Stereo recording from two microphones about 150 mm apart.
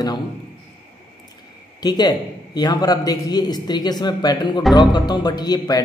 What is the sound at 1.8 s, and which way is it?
A man's voice, 25° left (ahead or behind).